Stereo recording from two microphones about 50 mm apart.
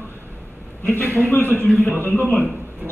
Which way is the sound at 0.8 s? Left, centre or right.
Left.